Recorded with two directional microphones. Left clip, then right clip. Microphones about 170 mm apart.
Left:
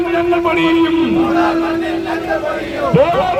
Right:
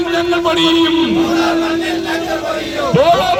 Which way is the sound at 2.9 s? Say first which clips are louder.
Right 2 dB; centre (ahead or behind).